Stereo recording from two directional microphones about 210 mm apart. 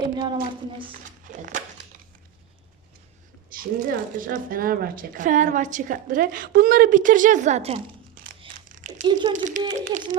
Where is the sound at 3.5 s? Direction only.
45° right (ahead or behind).